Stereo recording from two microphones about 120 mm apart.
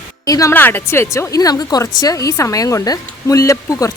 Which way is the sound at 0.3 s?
30° left (ahead or behind).